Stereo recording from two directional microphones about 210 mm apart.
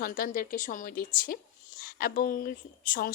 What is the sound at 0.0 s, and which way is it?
A woman's voice, 40° left (ahead or behind).